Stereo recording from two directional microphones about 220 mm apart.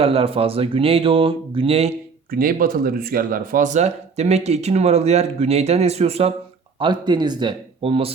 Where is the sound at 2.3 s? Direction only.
40° right (ahead or behind).